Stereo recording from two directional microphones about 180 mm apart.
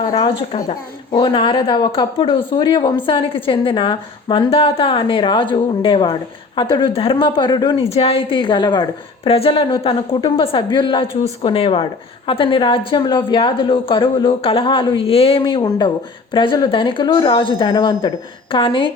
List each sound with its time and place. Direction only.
0.1 s a woman's voice: 30° left (ahead or behind)
7.9 s a woman's voice: 35° left (ahead or behind)